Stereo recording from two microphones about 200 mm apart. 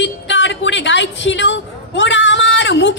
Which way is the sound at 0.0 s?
65° left (ahead or behind).